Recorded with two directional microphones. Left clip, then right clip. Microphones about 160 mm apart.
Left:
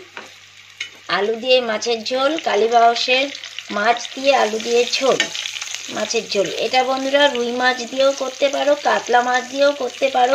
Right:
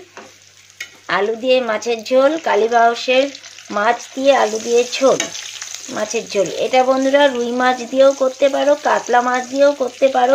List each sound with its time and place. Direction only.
1.0 s speech: 10° right (ahead or behind)
3.7 s frying: 5° right (ahead or behind)
5.9 s speech: 10° right (ahead or behind)
9.2 s frying: 10° right (ahead or behind)